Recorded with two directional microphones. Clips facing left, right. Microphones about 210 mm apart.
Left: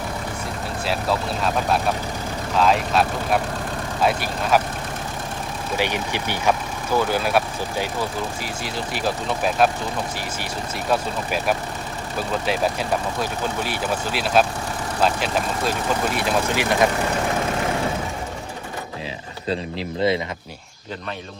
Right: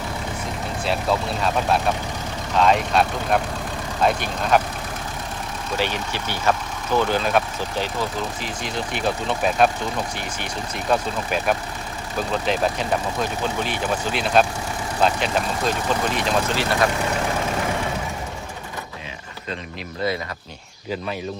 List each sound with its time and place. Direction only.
0.9 s speech: centre (ahead or behind)
5.7 s speech: 15° left (ahead or behind)
10.8 s speech: 5° left (ahead or behind)
16.1 s speech: 15° left (ahead or behind)
20.0 s speech: 25° left (ahead or behind)